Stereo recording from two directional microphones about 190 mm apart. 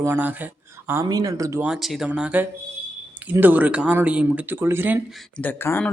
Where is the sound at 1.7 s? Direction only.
Centre (ahead or behind).